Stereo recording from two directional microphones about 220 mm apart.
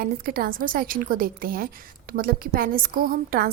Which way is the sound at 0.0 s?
40° right (ahead or behind).